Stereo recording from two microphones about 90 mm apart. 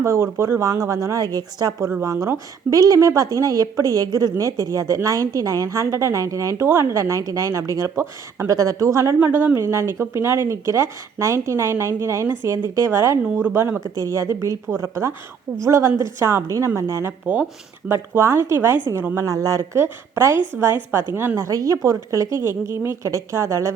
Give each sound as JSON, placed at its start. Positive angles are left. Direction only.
{"t": 0.0, "sound": "speech", "side_deg": -30}
{"t": 2.0, "sound": "speech", "side_deg": -30}
{"t": 7.9, "sound": "speech", "side_deg": -30}
{"t": 9.2, "sound": "speech", "side_deg": -20}
{"t": 13.8, "sound": "speech", "side_deg": -40}
{"t": 19.1, "sound": "speech", "side_deg": -40}
{"t": 20.5, "sound": "a woman's voice", "side_deg": -10}
{"t": 20.9, "sound": "speech", "side_deg": -30}